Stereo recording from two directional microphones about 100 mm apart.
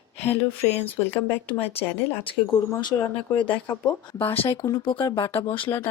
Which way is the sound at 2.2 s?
50° left (ahead or behind).